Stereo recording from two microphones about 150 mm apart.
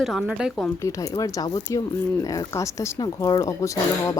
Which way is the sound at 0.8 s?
20° left (ahead or behind).